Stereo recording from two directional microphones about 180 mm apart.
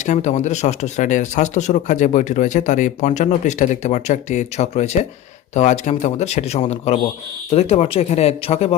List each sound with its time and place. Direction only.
0.0 s speech: 40° left (ahead or behind)